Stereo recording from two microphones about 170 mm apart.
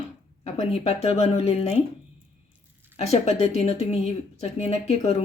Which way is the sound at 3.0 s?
35° left (ahead or behind).